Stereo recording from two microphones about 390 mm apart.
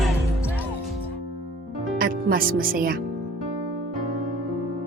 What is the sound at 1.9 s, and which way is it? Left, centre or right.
Music, right.